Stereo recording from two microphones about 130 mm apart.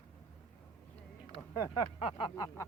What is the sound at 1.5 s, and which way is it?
A man's voice, 30° left (ahead or behind).